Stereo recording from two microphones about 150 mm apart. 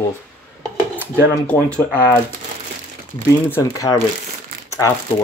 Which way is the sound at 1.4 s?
10° left (ahead or behind).